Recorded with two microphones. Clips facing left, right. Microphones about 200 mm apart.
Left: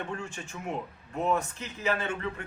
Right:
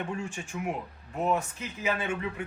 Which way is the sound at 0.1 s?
10° right (ahead or behind).